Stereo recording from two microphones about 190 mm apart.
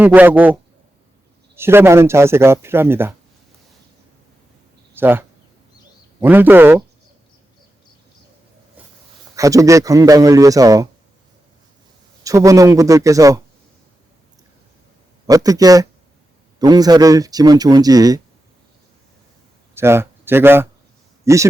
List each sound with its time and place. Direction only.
0.0 s speech: 10° right (ahead or behind)
4.9 s speech: 10° right (ahead or behind)
9.3 s speech: 15° right (ahead or behind)
12.2 s speech: 15° right (ahead or behind)
15.3 s speech: 20° right (ahead or behind)
19.7 s speech: 15° right (ahead or behind)